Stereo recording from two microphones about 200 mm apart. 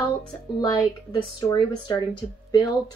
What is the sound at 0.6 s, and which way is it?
Speech, 20° left (ahead or behind).